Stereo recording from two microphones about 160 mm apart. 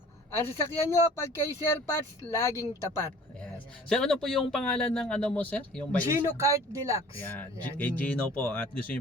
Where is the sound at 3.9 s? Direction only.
5° left (ahead or behind).